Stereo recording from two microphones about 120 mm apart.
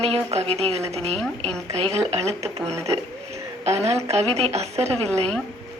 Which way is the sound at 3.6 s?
60° right (ahead or behind).